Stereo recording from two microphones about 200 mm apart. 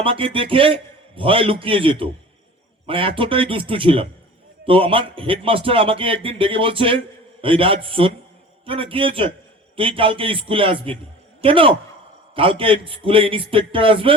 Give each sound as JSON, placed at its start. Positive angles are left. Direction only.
{"t": 0.0, "sound": "a man's voice", "side_deg": -25}